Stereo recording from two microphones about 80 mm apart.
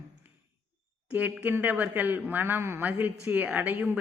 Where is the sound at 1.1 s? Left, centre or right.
Right.